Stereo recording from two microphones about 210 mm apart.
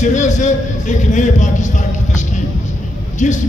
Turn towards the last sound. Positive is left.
turn(degrees=35)  # may be behind; listen again after turning